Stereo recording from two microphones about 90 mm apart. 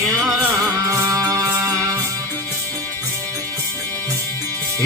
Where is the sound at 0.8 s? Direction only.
35° right (ahead or behind).